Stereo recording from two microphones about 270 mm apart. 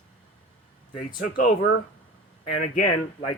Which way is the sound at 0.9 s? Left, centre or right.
Left.